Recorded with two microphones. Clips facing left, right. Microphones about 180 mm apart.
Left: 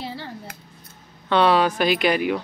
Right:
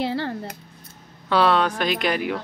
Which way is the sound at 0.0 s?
70° right (ahead or behind).